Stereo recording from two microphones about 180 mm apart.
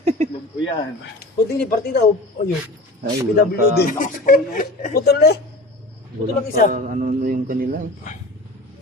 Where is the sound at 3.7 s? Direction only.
50° left (ahead or behind).